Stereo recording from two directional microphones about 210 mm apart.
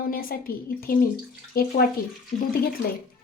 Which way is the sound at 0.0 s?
45° left (ahead or behind).